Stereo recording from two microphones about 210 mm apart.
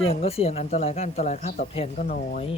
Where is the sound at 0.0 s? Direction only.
30° left (ahead or behind).